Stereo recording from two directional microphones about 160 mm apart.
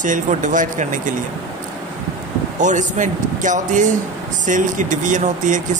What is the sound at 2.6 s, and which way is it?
Speech, 50° right (ahead or behind).